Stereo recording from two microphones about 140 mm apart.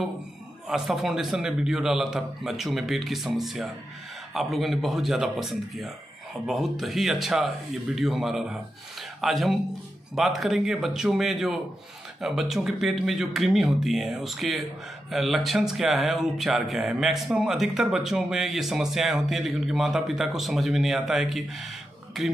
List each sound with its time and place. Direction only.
0.7 s speech: centre (ahead or behind)